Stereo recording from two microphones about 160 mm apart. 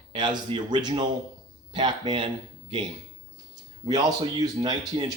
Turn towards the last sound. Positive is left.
turn(degrees=-25)  # may be behind; listen again after turning